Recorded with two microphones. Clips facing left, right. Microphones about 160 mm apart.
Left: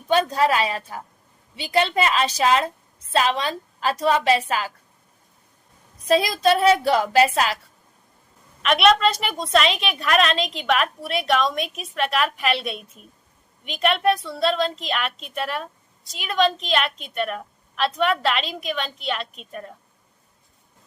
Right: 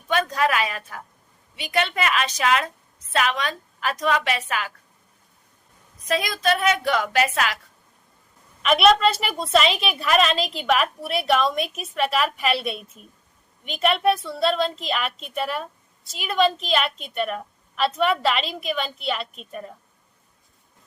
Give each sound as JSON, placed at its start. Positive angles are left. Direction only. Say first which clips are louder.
{"t": 0.1, "sound": "a woman's voice", "louder": "left 3 dB", "side_deg": 30}
{"t": 6.1, "sound": "a woman's voice", "louder": "left 4 dB", "side_deg": 30}
{"t": 8.6, "sound": "a woman's voice", "louder": "even", "side_deg": 0}